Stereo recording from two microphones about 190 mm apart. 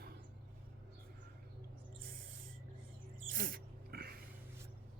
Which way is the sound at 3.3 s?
50° right (ahead or behind).